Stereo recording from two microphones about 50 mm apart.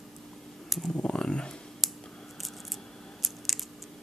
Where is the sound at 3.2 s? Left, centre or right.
Centre.